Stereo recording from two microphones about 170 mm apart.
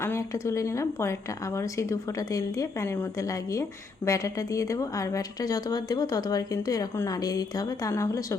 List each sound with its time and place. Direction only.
0.0 s a woman's voice: 15° left (ahead or behind)